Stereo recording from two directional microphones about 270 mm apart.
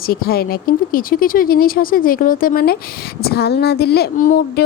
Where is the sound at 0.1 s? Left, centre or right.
Left.